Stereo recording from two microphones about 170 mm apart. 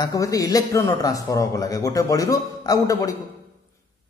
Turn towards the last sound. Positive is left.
turn(degrees=20)  # may be behind; listen again after turning